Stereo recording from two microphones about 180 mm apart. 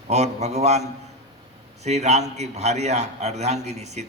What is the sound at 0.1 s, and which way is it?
A man's voice, 40° right (ahead or behind).